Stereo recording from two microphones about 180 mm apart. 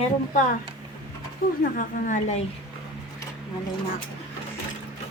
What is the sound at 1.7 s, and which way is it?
Speech, 40° left (ahead or behind).